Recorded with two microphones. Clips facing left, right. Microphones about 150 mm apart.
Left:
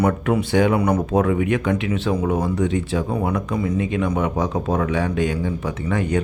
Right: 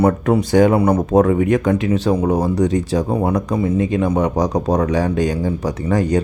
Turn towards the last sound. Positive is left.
turn(degrees=-35)  # may be behind; listen again after turning